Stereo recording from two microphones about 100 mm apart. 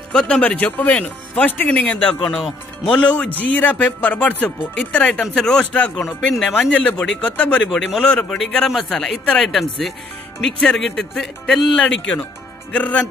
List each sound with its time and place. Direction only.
0.1 s speech: 5° left (ahead or behind)